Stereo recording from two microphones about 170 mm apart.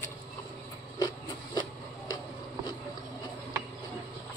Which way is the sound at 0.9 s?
25° left (ahead or behind).